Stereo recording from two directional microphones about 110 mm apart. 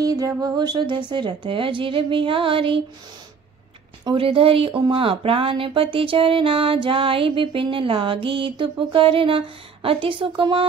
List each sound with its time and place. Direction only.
0.0 s music: 35° right (ahead or behind); by 2.8 s 50° right (ahead or behind)
4.0 s speech: 50° right (ahead or behind)
4.9 s music: 55° right (ahead or behind)